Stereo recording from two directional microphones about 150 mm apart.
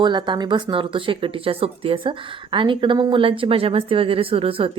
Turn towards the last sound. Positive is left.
turn(degrees=-40)  # may be behind; listen again after turning